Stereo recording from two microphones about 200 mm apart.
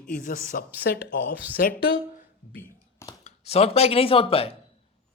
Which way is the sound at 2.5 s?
15° left (ahead or behind).